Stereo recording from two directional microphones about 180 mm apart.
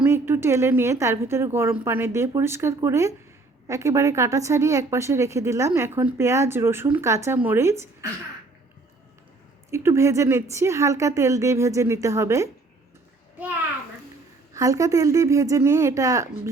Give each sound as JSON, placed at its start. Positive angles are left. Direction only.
{"t": 0.0, "sound": "a woman's voice", "side_deg": -15}
{"t": 9.7, "sound": "a woman's voice", "side_deg": -15}
{"t": 14.5, "sound": "a woman's voice", "side_deg": -20}